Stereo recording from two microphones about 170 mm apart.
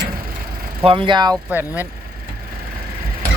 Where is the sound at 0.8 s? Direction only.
30° right (ahead or behind).